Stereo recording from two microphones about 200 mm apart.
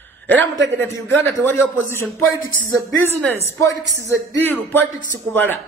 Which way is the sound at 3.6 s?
15° left (ahead or behind).